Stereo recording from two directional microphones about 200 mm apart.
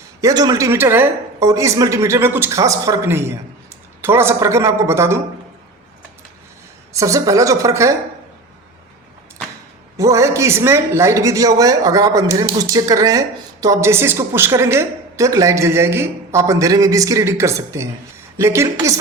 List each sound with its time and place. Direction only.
0.2 s speech: 15° right (ahead or behind)
6.9 s speech: 15° right (ahead or behind)
10.0 s speech: 15° right (ahead or behind)